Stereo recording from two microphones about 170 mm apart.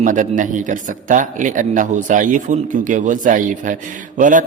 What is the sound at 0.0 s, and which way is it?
A man's voice, 50° right (ahead or behind).